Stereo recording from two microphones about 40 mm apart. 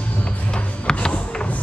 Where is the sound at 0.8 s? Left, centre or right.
Left.